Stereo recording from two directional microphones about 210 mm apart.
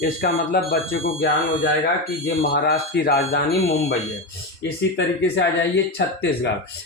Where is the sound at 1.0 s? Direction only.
60° left (ahead or behind).